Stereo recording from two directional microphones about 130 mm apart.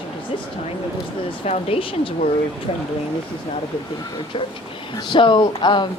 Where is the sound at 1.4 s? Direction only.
50° left (ahead or behind).